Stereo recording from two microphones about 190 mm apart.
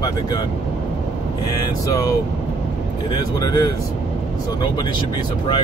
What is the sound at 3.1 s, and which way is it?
Speech, 20° left (ahead or behind).